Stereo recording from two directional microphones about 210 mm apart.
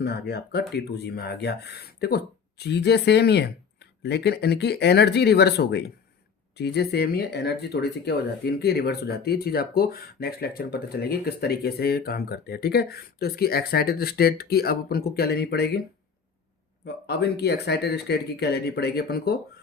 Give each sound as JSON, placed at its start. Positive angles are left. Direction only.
{"t": 0.0, "sound": "speech", "side_deg": 50}
{"t": 16.8, "sound": "speech", "side_deg": 50}